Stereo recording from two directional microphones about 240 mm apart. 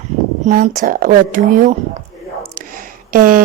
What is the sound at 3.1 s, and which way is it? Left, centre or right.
Speech, right.